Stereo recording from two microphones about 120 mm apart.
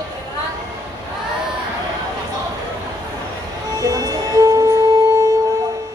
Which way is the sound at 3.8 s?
30° right (ahead or behind).